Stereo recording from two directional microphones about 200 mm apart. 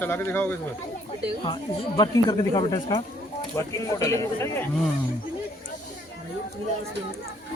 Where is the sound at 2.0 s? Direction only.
20° left (ahead or behind).